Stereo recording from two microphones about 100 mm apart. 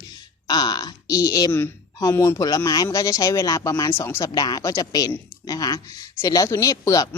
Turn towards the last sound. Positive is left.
turn(degrees=35)  # may be behind; listen again after turning